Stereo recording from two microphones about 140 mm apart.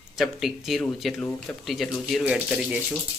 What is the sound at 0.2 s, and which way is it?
Speech, centre (ahead or behind).